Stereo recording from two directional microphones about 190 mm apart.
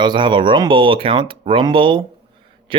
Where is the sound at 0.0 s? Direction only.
25° right (ahead or behind).